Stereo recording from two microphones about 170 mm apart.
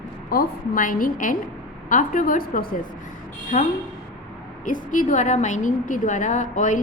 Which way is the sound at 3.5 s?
45° left (ahead or behind).